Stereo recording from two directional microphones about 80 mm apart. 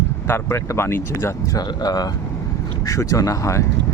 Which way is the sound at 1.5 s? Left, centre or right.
Left.